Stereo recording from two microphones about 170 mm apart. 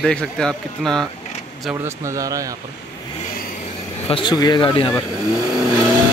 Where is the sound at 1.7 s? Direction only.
15° right (ahead or behind).